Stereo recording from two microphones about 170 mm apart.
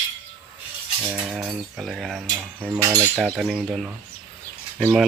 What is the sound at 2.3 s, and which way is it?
Speech, 10° right (ahead or behind).